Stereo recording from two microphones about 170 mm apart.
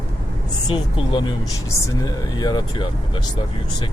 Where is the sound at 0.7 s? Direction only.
30° left (ahead or behind).